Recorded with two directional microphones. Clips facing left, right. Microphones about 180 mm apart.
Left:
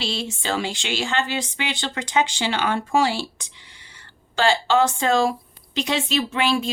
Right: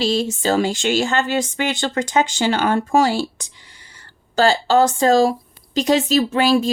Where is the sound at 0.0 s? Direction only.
40° right (ahead or behind).